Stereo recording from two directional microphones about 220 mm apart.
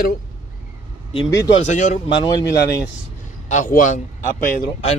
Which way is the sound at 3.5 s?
35° left (ahead or behind).